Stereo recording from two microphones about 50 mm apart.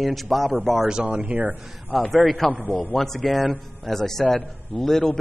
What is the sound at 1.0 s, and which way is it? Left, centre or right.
Speech, right.